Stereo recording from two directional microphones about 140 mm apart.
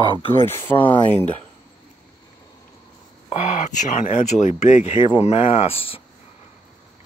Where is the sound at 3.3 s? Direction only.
60° left (ahead or behind); by 6.0 s 40° left (ahead or behind).